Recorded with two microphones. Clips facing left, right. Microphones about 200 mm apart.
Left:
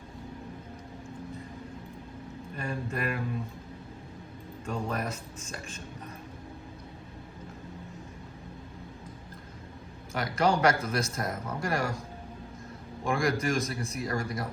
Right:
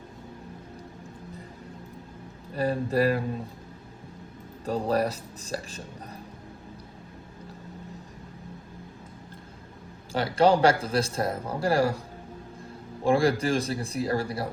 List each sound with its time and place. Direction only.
2.6 s speech: 35° right (ahead or behind)
4.6 s speech: 35° right (ahead or behind)
10.1 s speech: 30° right (ahead or behind)
13.1 s speech: 30° right (ahead or behind)